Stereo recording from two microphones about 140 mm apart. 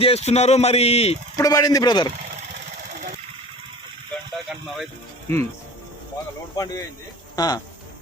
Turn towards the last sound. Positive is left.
turn(degrees=30)  # may be behind; listen again after turning